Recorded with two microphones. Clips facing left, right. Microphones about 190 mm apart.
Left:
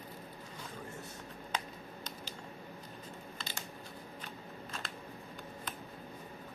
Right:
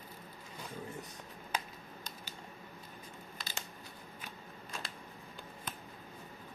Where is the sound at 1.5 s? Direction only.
10° right (ahead or behind).